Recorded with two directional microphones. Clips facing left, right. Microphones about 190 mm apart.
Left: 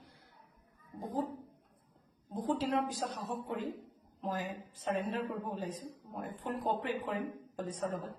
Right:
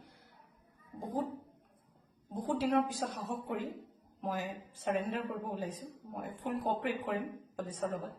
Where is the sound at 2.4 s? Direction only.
10° right (ahead or behind).